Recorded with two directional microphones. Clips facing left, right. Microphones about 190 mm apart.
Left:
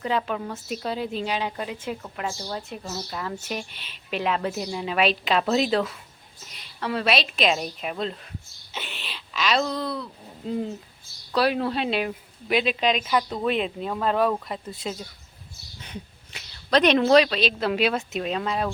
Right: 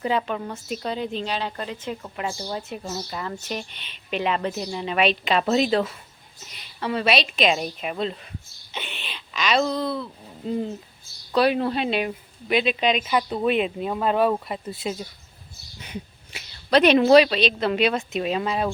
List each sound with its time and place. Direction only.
0.0 s speech: 5° right (ahead or behind)
2.0 s speech: 5° right (ahead or behind)